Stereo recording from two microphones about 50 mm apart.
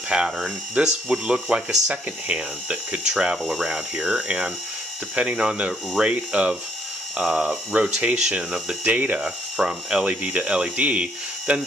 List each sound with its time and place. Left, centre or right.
0.1 s speech: centre
9.6 s speech: centre